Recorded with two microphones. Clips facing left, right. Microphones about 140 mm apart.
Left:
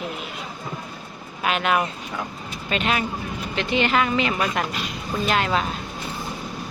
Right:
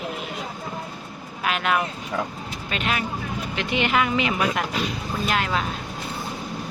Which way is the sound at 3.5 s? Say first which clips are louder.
Left 2 dB; 10° right (ahead or behind).